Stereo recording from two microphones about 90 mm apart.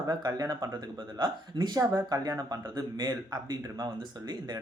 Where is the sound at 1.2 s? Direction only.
50° right (ahead or behind).